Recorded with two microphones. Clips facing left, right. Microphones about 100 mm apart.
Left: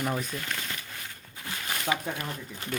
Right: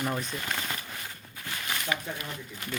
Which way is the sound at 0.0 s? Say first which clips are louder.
Left 1 dB; 5° left (ahead or behind).